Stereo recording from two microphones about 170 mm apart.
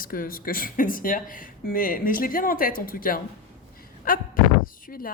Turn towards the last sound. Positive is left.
turn(degrees=55)  # may be behind; listen again after turning